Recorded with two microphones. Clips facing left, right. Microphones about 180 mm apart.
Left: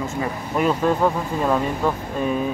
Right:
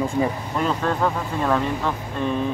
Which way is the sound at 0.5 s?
10° left (ahead or behind).